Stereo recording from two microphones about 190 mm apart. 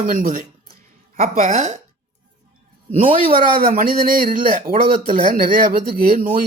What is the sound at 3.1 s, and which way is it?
Speech, 30° right (ahead or behind).